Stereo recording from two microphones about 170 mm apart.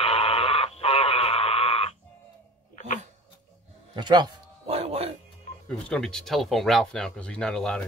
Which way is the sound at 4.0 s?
25° right (ahead or behind).